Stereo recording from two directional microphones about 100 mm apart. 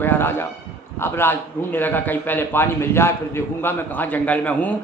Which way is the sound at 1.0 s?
25° left (ahead or behind).